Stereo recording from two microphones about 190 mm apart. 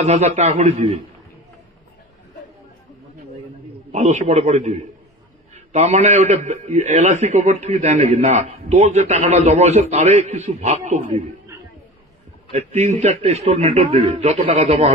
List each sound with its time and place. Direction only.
0.0 s a man's voice: 35° right (ahead or behind)
3.9 s a man's voice: 35° right (ahead or behind)
12.4 s a man's voice: 35° right (ahead or behind)